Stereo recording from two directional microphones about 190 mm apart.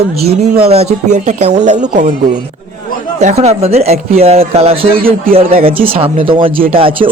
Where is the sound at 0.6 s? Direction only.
35° right (ahead or behind).